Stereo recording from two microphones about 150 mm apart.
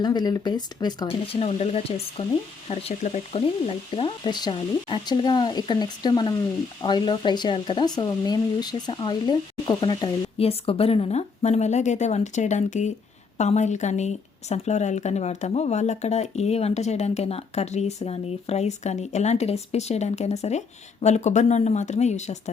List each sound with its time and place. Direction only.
0.0 s speech: 25° left (ahead or behind)
1.3 s speech: 45° left (ahead or behind)